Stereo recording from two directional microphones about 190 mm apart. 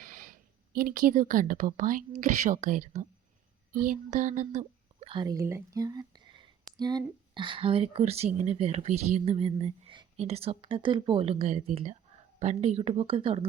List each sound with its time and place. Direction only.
0.0 s a woman's voice: 45° right (ahead or behind); by 13.4 s 30° right (ahead or behind)